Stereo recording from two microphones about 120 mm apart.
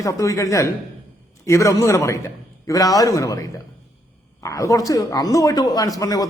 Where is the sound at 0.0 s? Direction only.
25° left (ahead or behind).